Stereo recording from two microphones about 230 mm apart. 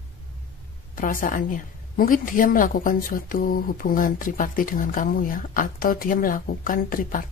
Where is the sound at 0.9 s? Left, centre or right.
Left.